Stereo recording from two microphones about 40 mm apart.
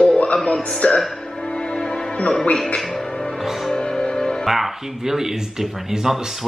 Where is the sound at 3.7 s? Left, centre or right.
Centre.